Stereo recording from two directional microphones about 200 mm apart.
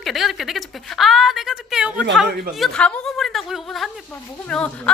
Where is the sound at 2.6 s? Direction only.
5° left (ahead or behind).